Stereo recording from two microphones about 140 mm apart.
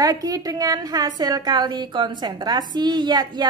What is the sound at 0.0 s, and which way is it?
A woman's voice, 25° right (ahead or behind).